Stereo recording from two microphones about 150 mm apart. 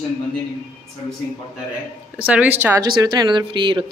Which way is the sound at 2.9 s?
30° right (ahead or behind).